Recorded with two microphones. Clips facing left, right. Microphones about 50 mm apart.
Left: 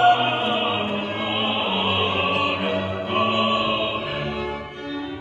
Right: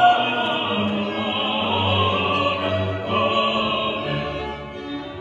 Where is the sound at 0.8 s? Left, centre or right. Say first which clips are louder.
Right 2 dB; centre.